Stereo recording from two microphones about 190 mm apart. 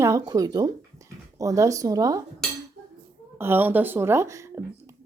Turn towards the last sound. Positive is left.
turn(degrees=-15)  # may be behind; listen again after turning